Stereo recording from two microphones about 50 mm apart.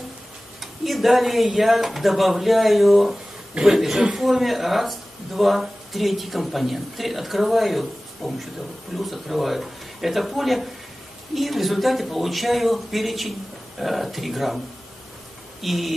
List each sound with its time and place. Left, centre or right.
0.6 s speech: centre
15.6 s speech: centre